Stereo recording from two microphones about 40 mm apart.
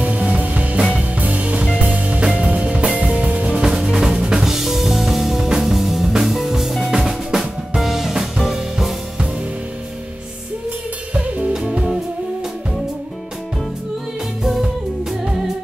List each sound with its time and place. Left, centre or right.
0.0 s music: right
0.7 s music: right
1.1 s music: right
3.7 s music: centre
4.2 s drum kit: centre
5.4 s music: centre
5.7 s drum kit: centre
11.1 s music: right
14.4 s music: centre